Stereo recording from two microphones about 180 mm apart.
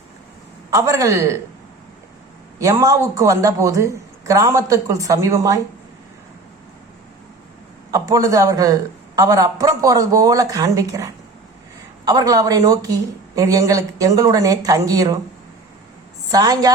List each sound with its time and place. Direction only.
0.7 s speech: 20° right (ahead or behind)
2.6 s speech: 15° right (ahead or behind)
7.9 s a man's voice: 20° right (ahead or behind)
16.3 s a man's voice: 20° right (ahead or behind)